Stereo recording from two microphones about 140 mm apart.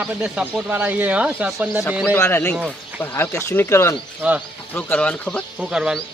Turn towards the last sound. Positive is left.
turn(degrees=-5)  # may be behind; listen again after turning